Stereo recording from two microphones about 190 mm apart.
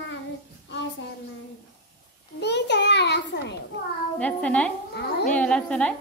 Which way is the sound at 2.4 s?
65° left (ahead or behind).